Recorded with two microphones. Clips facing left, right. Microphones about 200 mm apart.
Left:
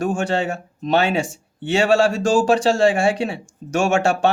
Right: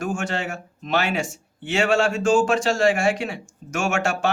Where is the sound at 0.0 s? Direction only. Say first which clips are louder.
Left 6 dB; 35° left (ahead or behind).